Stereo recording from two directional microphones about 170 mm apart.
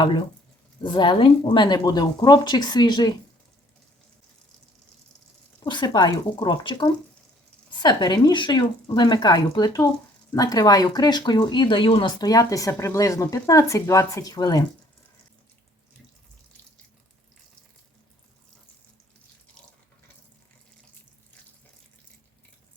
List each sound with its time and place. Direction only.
0.8 s speech: 25° left (ahead or behind)
5.6 s speech: 25° left (ahead or behind)